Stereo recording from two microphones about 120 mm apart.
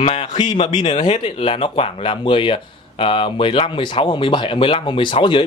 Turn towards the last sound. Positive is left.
turn(degrees=45)  # may be behind; listen again after turning